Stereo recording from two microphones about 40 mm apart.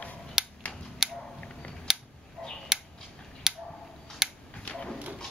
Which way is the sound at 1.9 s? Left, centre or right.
Centre.